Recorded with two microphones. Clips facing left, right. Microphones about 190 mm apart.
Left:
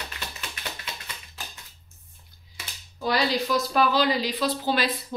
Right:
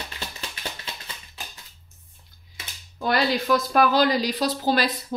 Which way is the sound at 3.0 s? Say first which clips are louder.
Right 2 dB; 55° right (ahead or behind).